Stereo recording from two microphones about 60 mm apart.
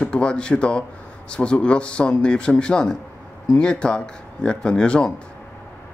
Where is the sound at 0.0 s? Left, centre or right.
Centre.